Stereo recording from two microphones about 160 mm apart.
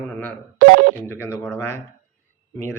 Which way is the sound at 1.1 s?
15° left (ahead or behind).